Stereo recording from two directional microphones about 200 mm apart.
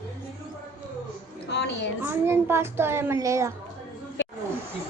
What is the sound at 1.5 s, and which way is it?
Speech, 60° left (ahead or behind).